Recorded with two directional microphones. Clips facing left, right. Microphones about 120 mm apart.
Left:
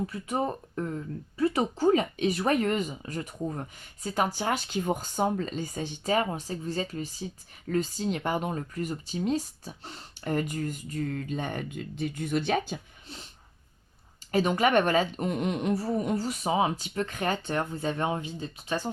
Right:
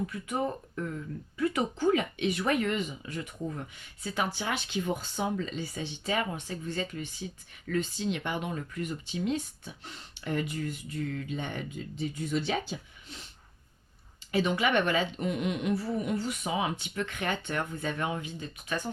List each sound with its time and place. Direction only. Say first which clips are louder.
0.8 s speech: left 4 dB; 35° left (ahead or behind)
11.7 s speech: left 2 dB; 60° left (ahead or behind)
14.3 s speech: left 3 dB; 45° left (ahead or behind)